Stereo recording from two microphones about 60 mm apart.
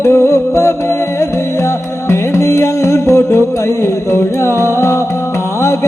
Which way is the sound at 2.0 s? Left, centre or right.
Left.